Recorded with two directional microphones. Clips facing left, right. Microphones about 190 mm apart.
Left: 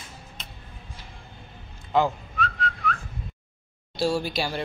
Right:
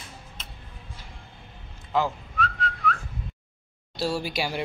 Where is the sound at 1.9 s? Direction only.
Centre (ahead or behind).